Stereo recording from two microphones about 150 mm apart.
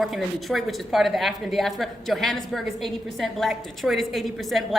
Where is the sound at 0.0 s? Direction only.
Centre (ahead or behind).